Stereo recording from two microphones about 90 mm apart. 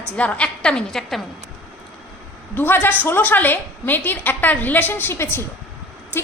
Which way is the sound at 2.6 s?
25° left (ahead or behind).